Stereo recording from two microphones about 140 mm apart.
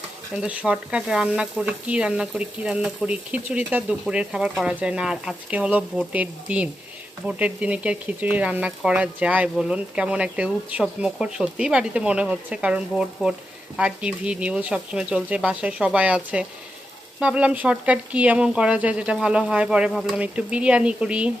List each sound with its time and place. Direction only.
0.3 s speech: 10° right (ahead or behind)